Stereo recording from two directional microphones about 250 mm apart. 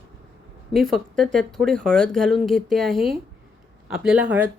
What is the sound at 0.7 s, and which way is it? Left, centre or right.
Speech, centre.